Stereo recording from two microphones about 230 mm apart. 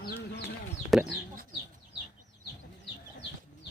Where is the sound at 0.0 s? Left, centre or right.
Left.